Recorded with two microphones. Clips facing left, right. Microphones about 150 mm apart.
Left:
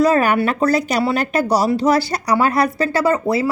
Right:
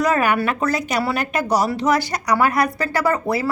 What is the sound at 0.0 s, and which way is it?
Speech, 35° left (ahead or behind).